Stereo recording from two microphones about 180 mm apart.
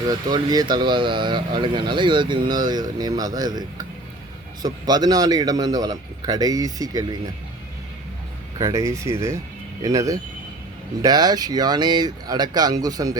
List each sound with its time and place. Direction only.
0.1 s speech: 20° right (ahead or behind)
8.5 s speech: 20° right (ahead or behind)